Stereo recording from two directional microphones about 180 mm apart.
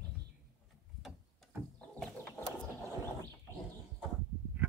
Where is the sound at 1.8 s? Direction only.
5° left (ahead or behind).